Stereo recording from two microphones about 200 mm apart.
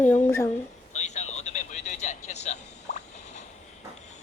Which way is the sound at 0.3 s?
10° left (ahead or behind).